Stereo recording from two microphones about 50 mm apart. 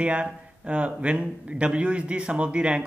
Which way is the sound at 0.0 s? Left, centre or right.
Right.